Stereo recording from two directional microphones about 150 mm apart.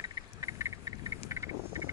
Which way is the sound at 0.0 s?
20° right (ahead or behind).